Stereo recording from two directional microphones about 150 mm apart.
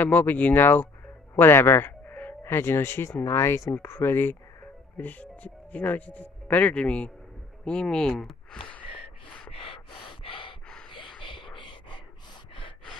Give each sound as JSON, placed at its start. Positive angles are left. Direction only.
{"t": 0.0, "sound": "speech", "side_deg": 10}
{"t": 9.5, "sound": "gasp", "side_deg": 40}
{"t": 11.1, "sound": "a sound", "side_deg": 35}